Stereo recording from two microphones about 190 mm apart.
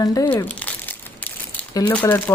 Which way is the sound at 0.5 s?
10° left (ahead or behind).